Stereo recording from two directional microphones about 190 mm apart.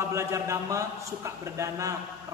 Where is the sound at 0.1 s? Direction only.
15° right (ahead or behind).